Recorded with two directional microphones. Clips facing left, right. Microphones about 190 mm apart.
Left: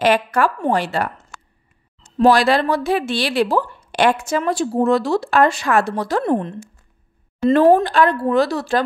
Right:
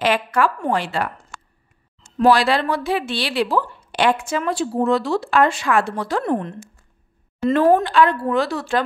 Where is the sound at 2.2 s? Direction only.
45° left (ahead or behind).